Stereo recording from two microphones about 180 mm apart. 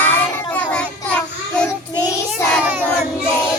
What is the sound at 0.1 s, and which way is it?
Child singing, 10° left (ahead or behind).